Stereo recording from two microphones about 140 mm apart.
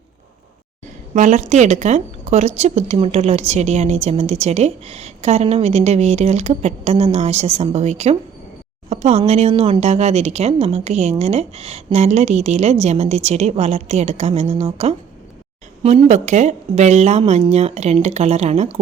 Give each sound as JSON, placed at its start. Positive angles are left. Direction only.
{"t": 1.1, "sound": "speech", "side_deg": -60}